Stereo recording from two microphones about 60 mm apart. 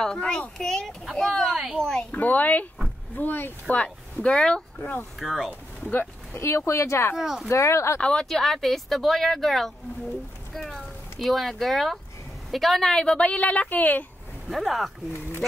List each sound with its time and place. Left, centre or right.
0.0 s speech: centre
2.0 s a woman's voice: left
3.6 s speech: left
4.7 s a woman's voice: left
5.2 s speech: centre
5.9 s speech: left
6.4 s speech: left
7.2 s speech: centre
7.4 s speech: left
8.0 s speech: centre
8.3 s speech: centre
13.0 s a woman's voice: centre
14.5 s speech: centre